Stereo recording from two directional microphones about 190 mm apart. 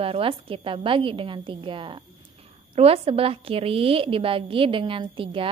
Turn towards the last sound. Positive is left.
turn(degrees=-25)  # may be behind; listen again after turning